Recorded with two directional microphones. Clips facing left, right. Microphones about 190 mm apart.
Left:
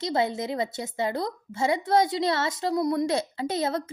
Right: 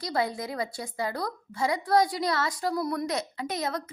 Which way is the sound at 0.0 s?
25° left (ahead or behind).